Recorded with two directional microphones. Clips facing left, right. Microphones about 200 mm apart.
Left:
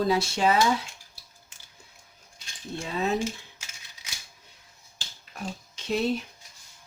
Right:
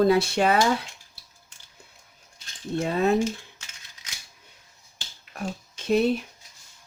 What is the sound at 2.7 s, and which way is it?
Speech, 55° right (ahead or behind).